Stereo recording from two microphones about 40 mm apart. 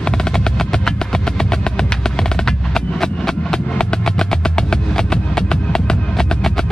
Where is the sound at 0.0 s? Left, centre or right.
Centre.